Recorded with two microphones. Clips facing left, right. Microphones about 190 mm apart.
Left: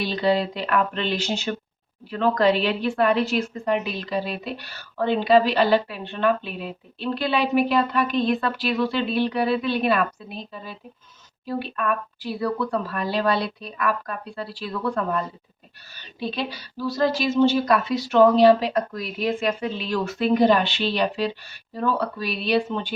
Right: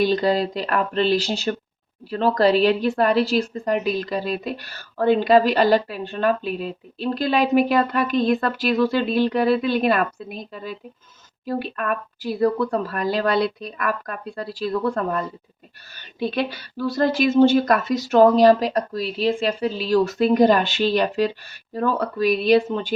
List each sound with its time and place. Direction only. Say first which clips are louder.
0.0 s a woman's voice: right 3 dB; 45° right (ahead or behind)
16.3 s a woman's voice: right 5 dB; 55° right (ahead or behind)